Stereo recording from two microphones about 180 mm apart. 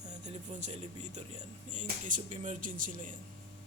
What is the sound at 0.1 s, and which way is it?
Speech, 40° right (ahead or behind).